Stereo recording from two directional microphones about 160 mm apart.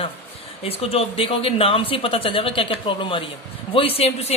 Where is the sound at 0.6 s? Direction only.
40° left (ahead or behind).